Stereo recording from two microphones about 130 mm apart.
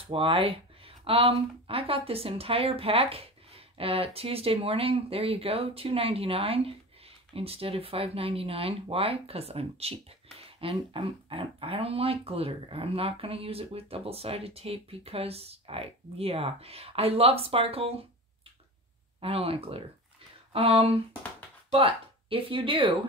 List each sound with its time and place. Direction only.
0.0 s speech: 45° right (ahead or behind)
19.2 s speech: 50° right (ahead or behind)